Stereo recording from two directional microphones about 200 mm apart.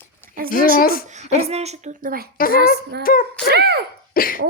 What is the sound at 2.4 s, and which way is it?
Speech, 45° left (ahead or behind).